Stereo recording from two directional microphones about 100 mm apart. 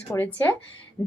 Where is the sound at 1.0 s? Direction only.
25° left (ahead or behind).